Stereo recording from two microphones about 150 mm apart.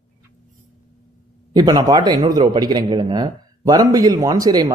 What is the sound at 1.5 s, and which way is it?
A man's voice, 25° right (ahead or behind).